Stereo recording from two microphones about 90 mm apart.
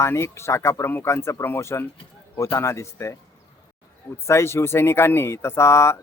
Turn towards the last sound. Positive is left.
turn(degrees=30)  # may be behind; listen again after turning